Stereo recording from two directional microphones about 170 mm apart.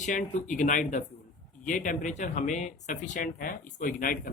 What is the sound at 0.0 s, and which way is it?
Speech, 50° left (ahead or behind).